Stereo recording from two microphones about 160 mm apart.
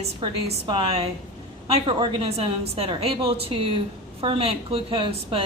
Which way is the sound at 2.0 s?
35° right (ahead or behind).